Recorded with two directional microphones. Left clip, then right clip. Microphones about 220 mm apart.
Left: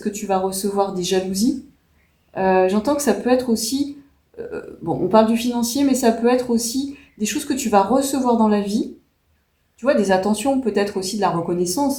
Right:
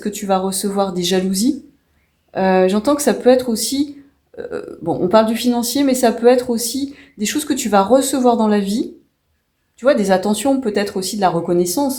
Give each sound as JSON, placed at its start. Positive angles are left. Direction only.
{"t": 0.0, "sound": "speech", "side_deg": -35}